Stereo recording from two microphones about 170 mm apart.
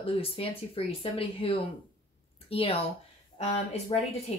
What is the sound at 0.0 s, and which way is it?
Speech, 35° left (ahead or behind).